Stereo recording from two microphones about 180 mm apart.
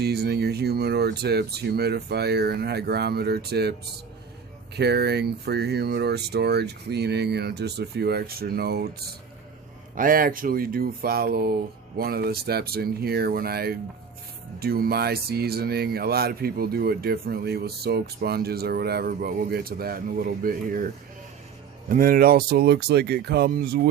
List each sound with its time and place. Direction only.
0.0 s speech: 65° right (ahead or behind)
9.9 s speech: 50° right (ahead or behind)